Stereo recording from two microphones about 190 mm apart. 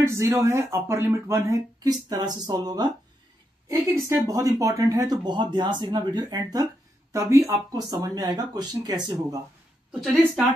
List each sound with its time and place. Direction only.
0.0 s a woman's voice: 15° right (ahead or behind)